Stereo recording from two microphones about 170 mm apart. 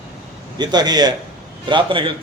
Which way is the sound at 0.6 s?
25° right (ahead or behind).